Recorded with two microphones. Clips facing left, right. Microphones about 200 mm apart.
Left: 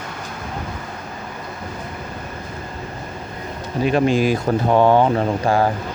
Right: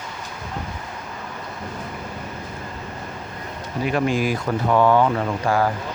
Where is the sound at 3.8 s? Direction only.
25° left (ahead or behind).